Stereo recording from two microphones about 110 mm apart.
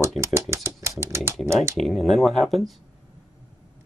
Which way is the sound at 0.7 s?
25° right (ahead or behind).